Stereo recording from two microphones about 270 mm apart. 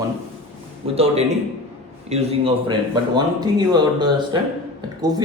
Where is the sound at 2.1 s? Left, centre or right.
Centre.